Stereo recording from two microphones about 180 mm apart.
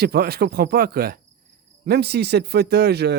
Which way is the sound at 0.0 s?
60° right (ahead or behind).